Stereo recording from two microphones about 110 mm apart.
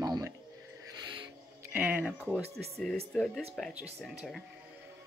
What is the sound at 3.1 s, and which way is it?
Speech, centre (ahead or behind).